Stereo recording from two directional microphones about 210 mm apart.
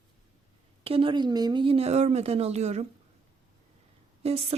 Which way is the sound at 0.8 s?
25° right (ahead or behind).